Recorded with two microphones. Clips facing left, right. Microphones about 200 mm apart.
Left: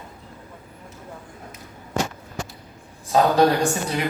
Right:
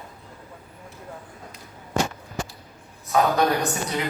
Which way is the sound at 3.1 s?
30° left (ahead or behind).